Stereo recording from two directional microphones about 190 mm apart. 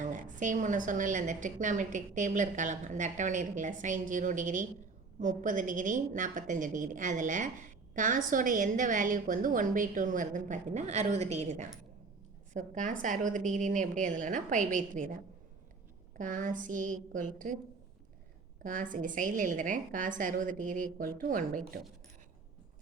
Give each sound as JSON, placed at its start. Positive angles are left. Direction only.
{"t": 0.0, "sound": "a woman's voice", "side_deg": -40}
{"t": 16.1, "sound": "a woman's voice", "side_deg": -40}
{"t": 18.6, "sound": "a woman's voice", "side_deg": -45}